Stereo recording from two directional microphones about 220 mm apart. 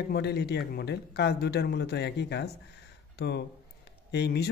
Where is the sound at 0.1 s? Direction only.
50° left (ahead or behind).